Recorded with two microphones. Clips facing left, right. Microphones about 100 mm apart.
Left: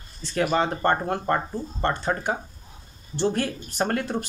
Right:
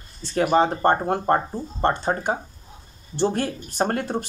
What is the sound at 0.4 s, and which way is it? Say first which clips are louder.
Speech: right 4 dB; 30° right (ahead or behind).